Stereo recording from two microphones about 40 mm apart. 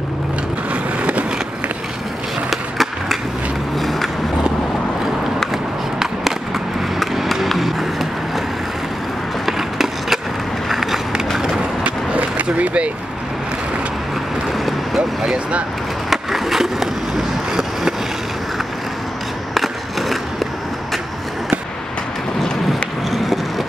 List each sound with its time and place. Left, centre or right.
2.5 s skateboard: centre
3.7 s a sound: centre
5.5 s skateboard: centre
7.4 s music: centre
9.5 s skateboard: centre
10.7 s run: centre
11.3 s skateboard: centre
11.8 s skateboard: right
15.0 s vehicle: right
16.1 s skateboard: centre
19.5 s skateboard: centre
23.0 s a sound: centre